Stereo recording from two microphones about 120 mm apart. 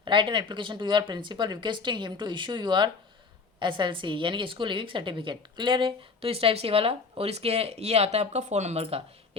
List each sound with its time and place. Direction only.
0.0 s a woman's voice: 40° right (ahead or behind)